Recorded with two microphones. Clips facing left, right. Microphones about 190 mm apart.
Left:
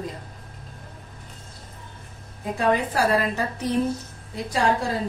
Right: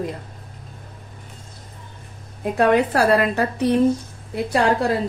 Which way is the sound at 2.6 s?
70° right (ahead or behind).